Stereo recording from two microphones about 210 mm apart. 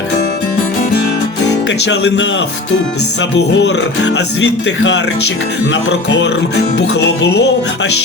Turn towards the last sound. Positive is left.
turn(degrees=55)  # may be behind; listen again after turning